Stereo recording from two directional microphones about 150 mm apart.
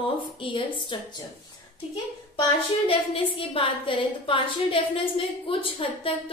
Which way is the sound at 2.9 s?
35° left (ahead or behind).